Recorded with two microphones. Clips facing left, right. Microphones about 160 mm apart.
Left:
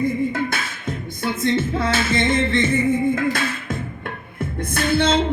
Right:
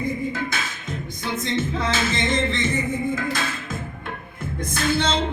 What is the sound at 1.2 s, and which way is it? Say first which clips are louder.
Music: left 5 dB; 55° left (ahead or behind).